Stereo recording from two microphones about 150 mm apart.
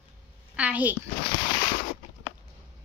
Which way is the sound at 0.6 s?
10° right (ahead or behind).